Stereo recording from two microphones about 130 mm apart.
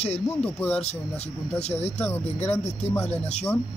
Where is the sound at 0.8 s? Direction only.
55° left (ahead or behind).